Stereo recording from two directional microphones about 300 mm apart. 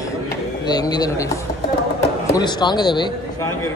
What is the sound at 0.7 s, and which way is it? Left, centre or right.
Speech, centre.